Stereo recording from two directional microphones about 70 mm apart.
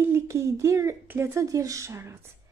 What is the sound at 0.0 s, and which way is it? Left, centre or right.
Speech, right.